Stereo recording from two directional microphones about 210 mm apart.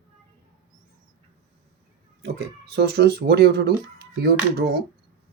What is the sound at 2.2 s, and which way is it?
Speech, 50° right (ahead or behind).